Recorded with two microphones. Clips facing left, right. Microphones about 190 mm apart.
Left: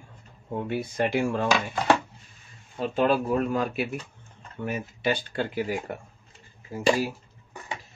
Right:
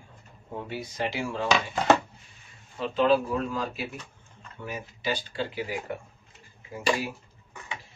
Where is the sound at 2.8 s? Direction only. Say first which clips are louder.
Even; 50° left (ahead or behind).